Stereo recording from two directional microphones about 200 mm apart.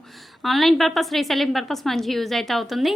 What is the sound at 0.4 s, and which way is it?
A woman's voice, centre (ahead or behind).